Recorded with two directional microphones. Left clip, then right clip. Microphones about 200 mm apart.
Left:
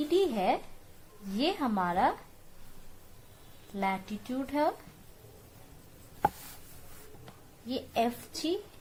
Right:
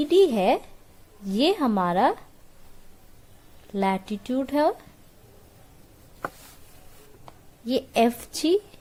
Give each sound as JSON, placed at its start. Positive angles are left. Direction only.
{"t": 0.1, "sound": "speech", "side_deg": -55}
{"t": 3.8, "sound": "speech", "side_deg": -55}
{"t": 7.7, "sound": "speech", "side_deg": -55}